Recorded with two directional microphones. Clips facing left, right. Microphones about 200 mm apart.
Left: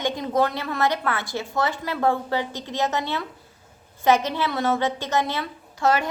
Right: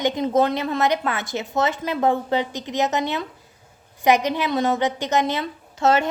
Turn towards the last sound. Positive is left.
turn(degrees=-25)  # may be behind; listen again after turning